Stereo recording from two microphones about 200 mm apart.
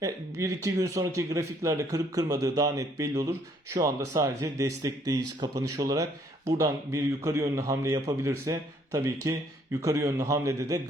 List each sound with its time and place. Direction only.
0.0 s a man's voice: 15° right (ahead or behind)